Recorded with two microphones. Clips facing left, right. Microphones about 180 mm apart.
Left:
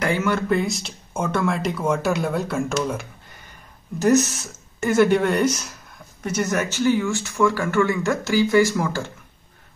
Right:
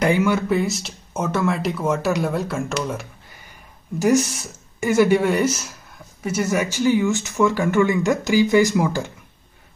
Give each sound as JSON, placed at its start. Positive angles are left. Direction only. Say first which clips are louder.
{"t": 0.0, "sound": "speech", "louder": "right 3 dB", "side_deg": -15}